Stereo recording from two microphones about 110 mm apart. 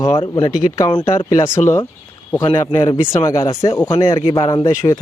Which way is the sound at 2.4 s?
50° left (ahead or behind).